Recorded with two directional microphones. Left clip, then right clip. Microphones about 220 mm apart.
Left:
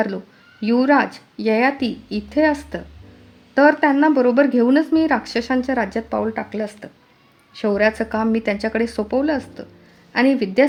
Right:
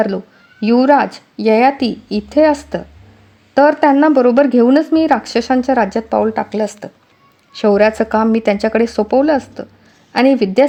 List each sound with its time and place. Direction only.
0.6 s speech: 35° right (ahead or behind)